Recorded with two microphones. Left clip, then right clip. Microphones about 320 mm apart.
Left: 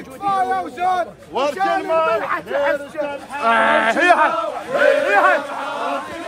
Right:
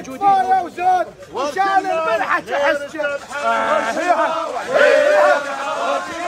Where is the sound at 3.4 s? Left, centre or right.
Left.